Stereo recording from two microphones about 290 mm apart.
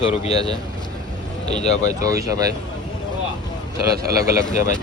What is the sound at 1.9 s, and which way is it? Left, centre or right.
Speech, centre.